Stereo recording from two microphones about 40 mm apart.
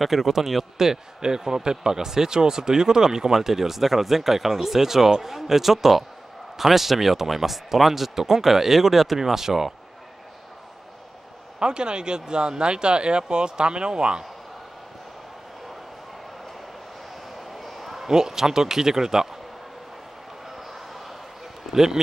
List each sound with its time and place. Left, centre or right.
0.0 s a man's voice: centre
11.6 s speech: right
17.4 s a sound: centre
18.0 s a man's voice: centre
20.4 s a sound: centre
21.7 s a man's voice: centre